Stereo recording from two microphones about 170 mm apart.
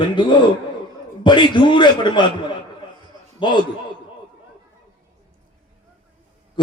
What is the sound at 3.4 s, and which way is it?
Speech, 30° left (ahead or behind).